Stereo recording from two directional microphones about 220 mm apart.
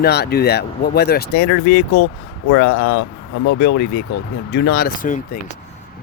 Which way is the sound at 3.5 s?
50° left (ahead or behind).